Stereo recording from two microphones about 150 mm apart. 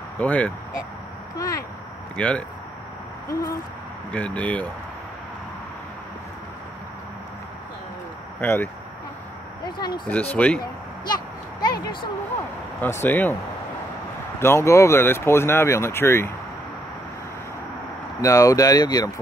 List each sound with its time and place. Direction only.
0.2 s speech: 10° left (ahead or behind)
1.3 s speech: 20° left (ahead or behind)
2.1 s speech: 10° left (ahead or behind)
3.3 s speech: 20° left (ahead or behind)
4.1 s speech: 10° left (ahead or behind)
8.4 s speech: 15° left (ahead or behind)
9.8 s speech: 30° left (ahead or behind)
10.3 s speech: 10° left (ahead or behind)
11.1 s a sound: 25° left (ahead or behind)
13.0 s speech: 10° left (ahead or behind)
14.4 s speech: 20° left (ahead or behind)
18.2 s speech: 20° left (ahead or behind)